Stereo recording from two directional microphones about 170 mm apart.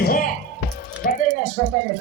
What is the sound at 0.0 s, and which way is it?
Music, 55° left (ahead or behind).